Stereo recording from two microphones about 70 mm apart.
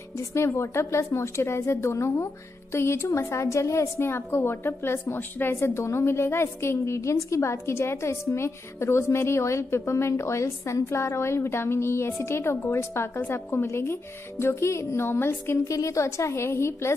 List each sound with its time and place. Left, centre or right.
0.3 s a woman's voice: left
15.0 s a woman's voice: left
15.7 s a woman's voice: left